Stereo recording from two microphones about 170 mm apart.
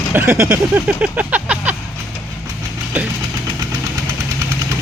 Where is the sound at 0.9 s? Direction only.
5° right (ahead or behind).